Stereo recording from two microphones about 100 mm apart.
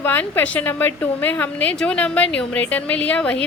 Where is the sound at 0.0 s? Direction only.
20° left (ahead or behind).